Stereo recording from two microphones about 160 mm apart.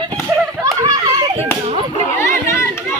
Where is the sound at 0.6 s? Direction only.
20° right (ahead or behind).